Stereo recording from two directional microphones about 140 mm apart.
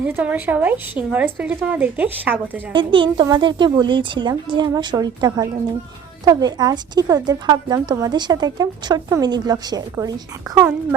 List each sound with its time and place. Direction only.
0.0 s a woman's voice: 10° right (ahead or behind)
2.7 s a woman's voice: 35° right (ahead or behind)